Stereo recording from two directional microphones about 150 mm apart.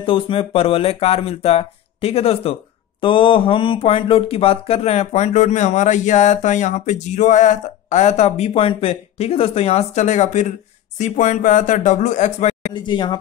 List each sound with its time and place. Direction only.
0.0 s speech: 35° left (ahead or behind)
12.7 s speech: 30° left (ahead or behind)